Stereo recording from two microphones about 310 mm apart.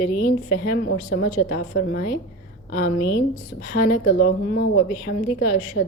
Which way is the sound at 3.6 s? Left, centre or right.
Left.